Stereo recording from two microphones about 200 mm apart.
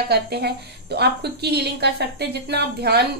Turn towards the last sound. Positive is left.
turn(degrees=-55)  # may be behind; listen again after turning